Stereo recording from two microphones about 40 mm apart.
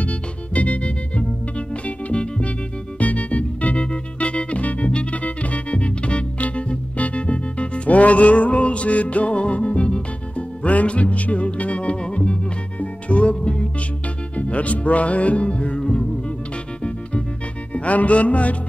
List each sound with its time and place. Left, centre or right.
0.0 s music: left
17.7 s music: left